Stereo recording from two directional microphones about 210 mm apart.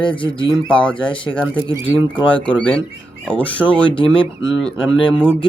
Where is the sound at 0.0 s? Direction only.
25° left (ahead or behind).